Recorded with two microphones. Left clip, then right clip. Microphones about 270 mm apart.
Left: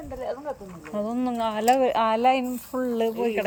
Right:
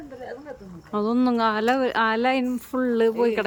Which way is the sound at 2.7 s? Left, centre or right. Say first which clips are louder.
Right 3 dB; right.